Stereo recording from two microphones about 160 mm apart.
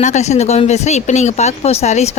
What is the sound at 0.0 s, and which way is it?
Speech, 45° left (ahead or behind).